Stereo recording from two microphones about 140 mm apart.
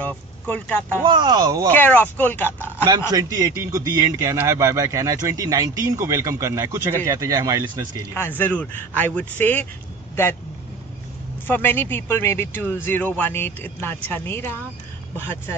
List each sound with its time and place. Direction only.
0.0 s speech: 10° left (ahead or behind)
1.0 s speech: 30° right (ahead or behind)
1.7 s speech: 15° left (ahead or behind)
3.1 s a man's voice: 25° right (ahead or behind)
8.1 s speech: 15° left (ahead or behind)
11.4 s speech: 15° left (ahead or behind)